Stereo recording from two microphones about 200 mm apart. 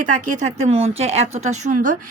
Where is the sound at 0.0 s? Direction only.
40° right (ahead or behind).